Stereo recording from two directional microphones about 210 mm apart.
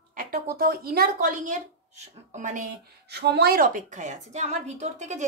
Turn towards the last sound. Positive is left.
turn(degrees=-35)  # may be behind; listen again after turning